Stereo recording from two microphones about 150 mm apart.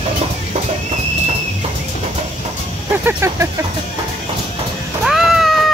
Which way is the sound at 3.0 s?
15° right (ahead or behind).